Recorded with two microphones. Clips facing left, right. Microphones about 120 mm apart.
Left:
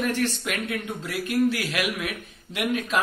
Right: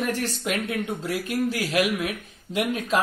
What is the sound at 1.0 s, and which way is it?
Speech, 35° right (ahead or behind).